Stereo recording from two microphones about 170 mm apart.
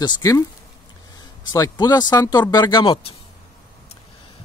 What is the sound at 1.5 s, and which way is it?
Speech, 20° left (ahead or behind).